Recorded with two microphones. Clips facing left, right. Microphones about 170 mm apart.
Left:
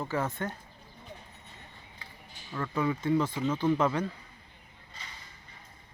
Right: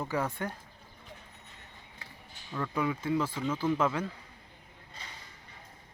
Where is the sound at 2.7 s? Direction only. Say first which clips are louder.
Left 3 dB; 5° right (ahead or behind).